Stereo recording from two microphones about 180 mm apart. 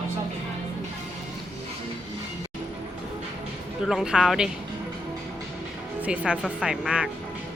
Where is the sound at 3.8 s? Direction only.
Centre (ahead or behind).